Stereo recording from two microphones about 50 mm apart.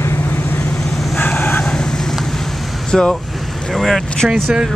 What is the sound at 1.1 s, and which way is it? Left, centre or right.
Vehicle, left.